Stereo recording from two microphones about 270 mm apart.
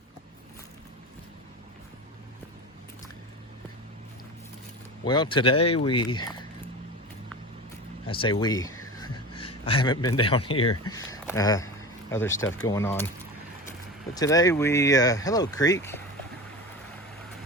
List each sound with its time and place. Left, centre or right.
5.0 s speech: centre
8.0 s speech: centre
9.0 s a sound: centre
10.2 s speech: centre
14.2 s speech: centre